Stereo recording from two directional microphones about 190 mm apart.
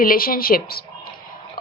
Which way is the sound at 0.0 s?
50° left (ahead or behind).